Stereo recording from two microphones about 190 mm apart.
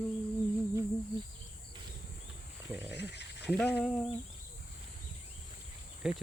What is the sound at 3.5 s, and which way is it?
Speech, 5° right (ahead or behind).